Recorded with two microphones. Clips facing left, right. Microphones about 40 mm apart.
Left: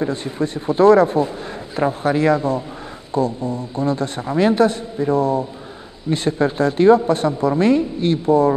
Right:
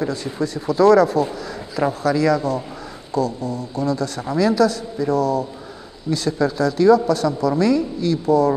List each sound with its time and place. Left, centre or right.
0.1 s a woman's voice: left